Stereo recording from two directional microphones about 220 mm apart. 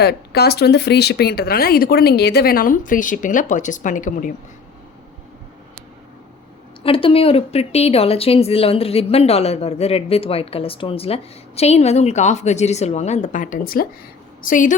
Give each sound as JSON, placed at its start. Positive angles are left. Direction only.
{"t": 0.0, "sound": "speech", "side_deg": 45}
{"t": 6.8, "sound": "a woman's voice", "side_deg": 25}